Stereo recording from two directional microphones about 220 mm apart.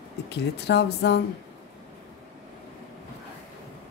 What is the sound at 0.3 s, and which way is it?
Speech, 50° left (ahead or behind).